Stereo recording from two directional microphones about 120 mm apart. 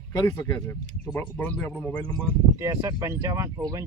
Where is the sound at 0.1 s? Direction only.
25° left (ahead or behind).